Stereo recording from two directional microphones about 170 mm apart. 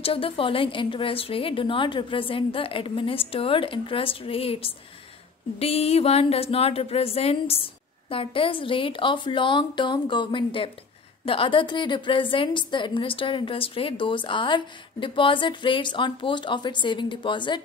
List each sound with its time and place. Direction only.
0.0 s a woman's voice: 35° left (ahead or behind)